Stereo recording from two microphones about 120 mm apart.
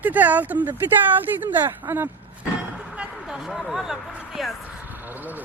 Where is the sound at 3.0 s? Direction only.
5° right (ahead or behind).